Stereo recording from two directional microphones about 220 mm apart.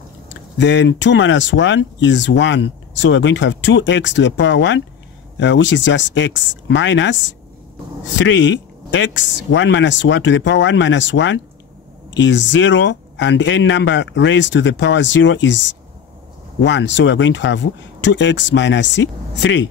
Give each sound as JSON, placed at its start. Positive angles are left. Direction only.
{"t": 0.6, "sound": "speech", "side_deg": 55}